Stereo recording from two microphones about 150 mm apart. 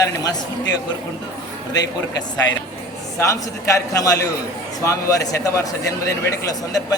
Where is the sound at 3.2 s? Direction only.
20° left (ahead or behind).